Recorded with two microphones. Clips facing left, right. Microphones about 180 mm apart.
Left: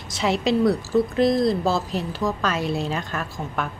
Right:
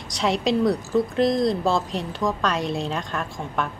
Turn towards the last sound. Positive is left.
turn(degrees=5)  # may be behind; listen again after turning